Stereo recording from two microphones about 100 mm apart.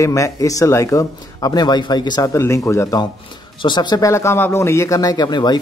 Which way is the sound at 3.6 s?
45° left (ahead or behind).